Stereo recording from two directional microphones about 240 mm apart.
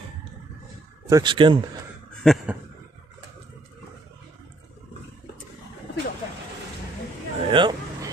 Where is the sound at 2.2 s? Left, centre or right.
Centre.